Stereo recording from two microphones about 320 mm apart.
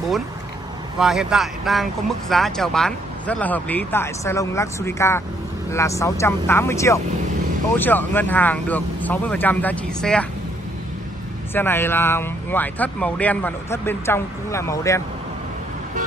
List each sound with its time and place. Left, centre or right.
0.9 s speech: centre
11.5 s speech: centre